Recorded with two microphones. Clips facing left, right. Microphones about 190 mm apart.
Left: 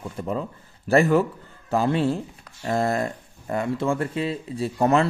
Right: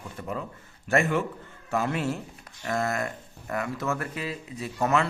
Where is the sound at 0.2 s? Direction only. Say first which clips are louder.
Left 6 dB; 30° left (ahead or behind).